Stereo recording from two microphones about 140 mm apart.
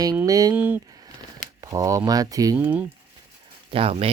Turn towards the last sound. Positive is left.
turn(degrees=-45)  # may be behind; listen again after turning